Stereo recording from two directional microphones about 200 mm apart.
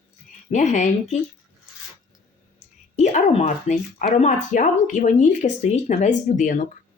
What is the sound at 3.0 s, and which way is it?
Speech, 35° left (ahead or behind).